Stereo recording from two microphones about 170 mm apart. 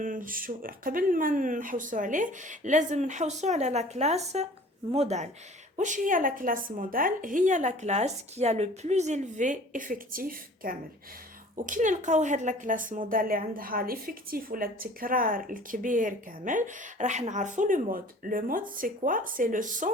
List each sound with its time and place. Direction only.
0.0 s a woman's voice: 50° right (ahead or behind)